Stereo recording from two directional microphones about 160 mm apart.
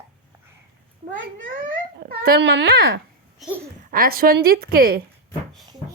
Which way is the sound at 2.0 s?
75° right (ahead or behind).